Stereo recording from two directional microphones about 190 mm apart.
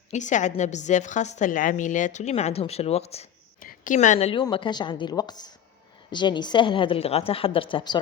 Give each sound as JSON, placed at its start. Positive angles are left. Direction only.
{"t": 0.1, "sound": "a woman's voice", "side_deg": 40}
{"t": 3.6, "sound": "a woman's voice", "side_deg": 45}